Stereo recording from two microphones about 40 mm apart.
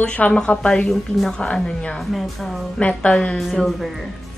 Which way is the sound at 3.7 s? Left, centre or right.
Centre.